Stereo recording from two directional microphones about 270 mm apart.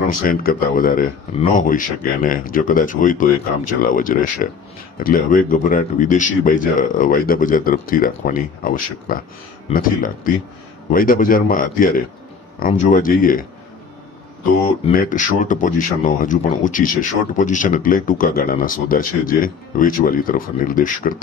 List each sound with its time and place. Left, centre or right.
0.2 s speech: left
14.9 s speech: left